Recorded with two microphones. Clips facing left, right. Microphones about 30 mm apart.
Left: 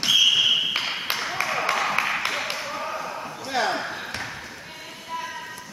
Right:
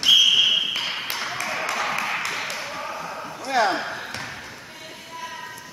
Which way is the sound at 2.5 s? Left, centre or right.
Centre.